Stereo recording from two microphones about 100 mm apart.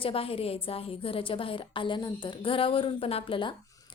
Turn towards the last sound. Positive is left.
turn(degrees=60)  # may be behind; listen again after turning